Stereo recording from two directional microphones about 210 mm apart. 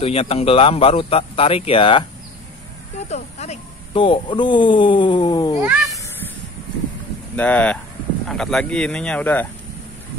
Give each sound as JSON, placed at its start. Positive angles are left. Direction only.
{"t": 0.0, "sound": "speech", "side_deg": 30}
{"t": 3.1, "sound": "speech", "side_deg": 30}
{"t": 5.6, "sound": "a child's voice", "side_deg": -10}
{"t": 7.3, "sound": "speech", "side_deg": 5}